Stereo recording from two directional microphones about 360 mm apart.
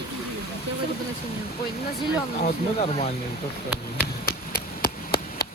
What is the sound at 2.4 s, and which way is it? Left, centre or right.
Speech, centre.